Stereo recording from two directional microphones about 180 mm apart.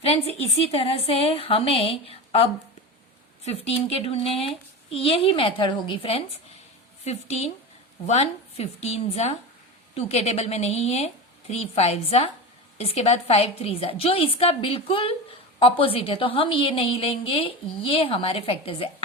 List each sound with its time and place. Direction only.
0.0 s a woman's voice: 35° left (ahead or behind)